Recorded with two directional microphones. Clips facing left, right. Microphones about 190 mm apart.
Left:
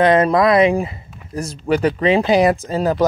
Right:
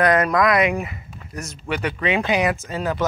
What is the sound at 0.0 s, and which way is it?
Speech, 25° left (ahead or behind).